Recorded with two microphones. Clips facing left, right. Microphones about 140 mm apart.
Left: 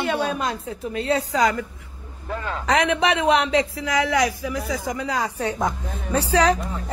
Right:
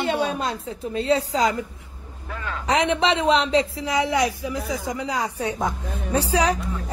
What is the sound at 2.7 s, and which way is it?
A man's voice, 25° right (ahead or behind).